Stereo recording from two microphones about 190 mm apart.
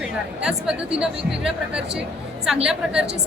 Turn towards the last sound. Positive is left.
turn(degrees=-5)  # may be behind; listen again after turning